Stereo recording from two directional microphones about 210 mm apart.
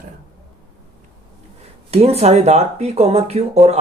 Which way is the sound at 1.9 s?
30° right (ahead or behind).